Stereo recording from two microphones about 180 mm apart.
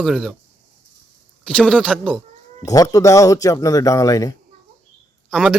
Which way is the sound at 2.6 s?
20° left (ahead or behind).